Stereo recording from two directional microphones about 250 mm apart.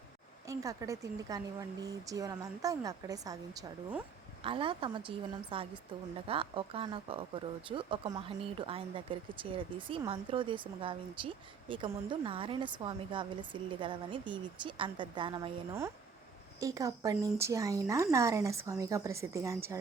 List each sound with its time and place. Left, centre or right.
0.4 s a woman's voice: centre